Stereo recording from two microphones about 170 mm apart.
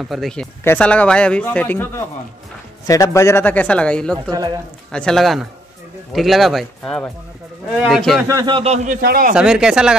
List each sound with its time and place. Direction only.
0.0 s speech: centre (ahead or behind)
8.3 s speech: 25° right (ahead or behind); by 9.0 s 45° right (ahead or behind)
9.0 s speech: 60° right (ahead or behind)
9.3 s speech: 5° right (ahead or behind)